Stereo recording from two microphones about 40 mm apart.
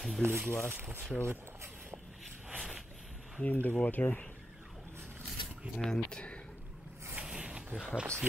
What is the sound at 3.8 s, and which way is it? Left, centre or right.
Speech, left.